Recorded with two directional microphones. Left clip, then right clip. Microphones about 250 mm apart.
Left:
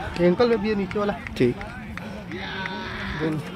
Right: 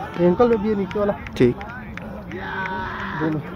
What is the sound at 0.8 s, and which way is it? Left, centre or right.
Speech, centre.